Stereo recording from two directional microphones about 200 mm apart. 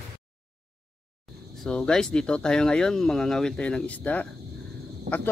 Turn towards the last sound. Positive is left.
turn(degrees=-55)  # may be behind; listen again after turning